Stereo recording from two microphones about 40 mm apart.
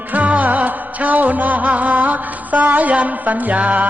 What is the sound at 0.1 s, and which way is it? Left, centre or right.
Music, right.